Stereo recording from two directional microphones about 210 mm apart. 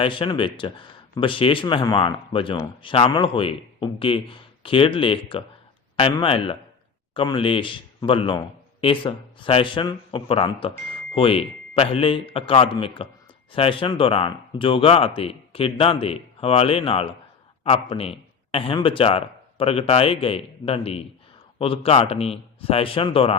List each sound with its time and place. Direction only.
0.0 s a man's voice: 25° left (ahead or behind)